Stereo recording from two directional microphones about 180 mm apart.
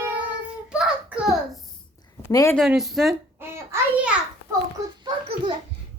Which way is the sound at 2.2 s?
15° left (ahead or behind).